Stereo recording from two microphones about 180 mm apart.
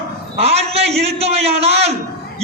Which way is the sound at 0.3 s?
35° right (ahead or behind).